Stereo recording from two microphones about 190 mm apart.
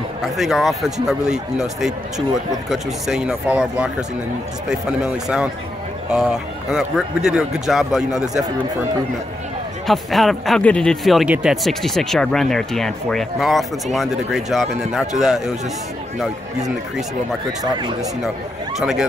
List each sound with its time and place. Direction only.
0.4 s speech: centre (ahead or behind)
9.8 s speech: centre (ahead or behind)
17.7 s speech: 25° right (ahead or behind)
18.8 s speech: centre (ahead or behind)